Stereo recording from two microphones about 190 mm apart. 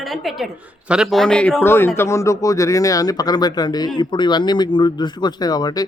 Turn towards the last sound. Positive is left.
turn(degrees=20)  # may be behind; listen again after turning